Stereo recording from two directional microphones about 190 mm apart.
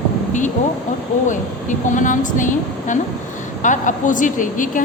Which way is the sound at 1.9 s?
40° left (ahead or behind).